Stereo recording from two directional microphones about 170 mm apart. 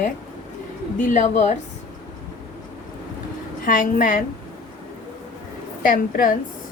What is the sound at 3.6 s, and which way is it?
Speech, 50° left (ahead or behind).